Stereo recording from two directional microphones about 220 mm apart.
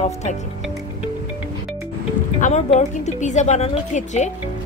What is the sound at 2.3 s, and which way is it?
A woman's voice, 35° left (ahead or behind).